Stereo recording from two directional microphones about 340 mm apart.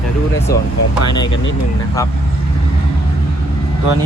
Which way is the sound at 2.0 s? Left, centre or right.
Centre.